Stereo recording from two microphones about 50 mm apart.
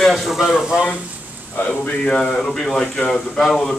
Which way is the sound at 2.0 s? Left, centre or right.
Centre.